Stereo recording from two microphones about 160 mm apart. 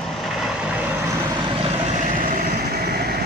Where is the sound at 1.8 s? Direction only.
60° right (ahead or behind); by 3.1 s 75° right (ahead or behind).